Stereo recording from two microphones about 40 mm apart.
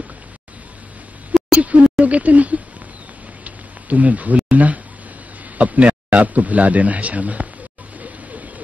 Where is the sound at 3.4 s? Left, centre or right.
Right.